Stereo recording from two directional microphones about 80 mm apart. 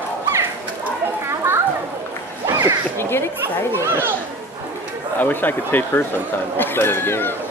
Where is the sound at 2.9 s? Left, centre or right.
Left.